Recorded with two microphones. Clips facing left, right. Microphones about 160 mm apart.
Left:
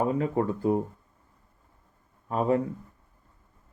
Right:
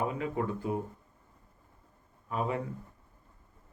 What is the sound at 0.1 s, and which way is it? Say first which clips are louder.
Speech: left 7 dB; 40° left (ahead or behind).